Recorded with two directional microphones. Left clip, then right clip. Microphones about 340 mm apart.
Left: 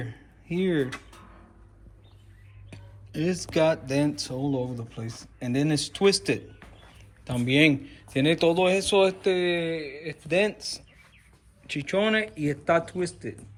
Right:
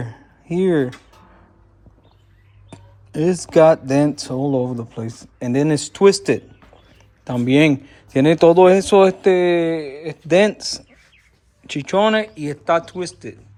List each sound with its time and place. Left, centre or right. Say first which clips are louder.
0.0 s a sound: right 6 dB; centre
2.6 s speech: right 7 dB; centre
7.5 s speech: right 6 dB; centre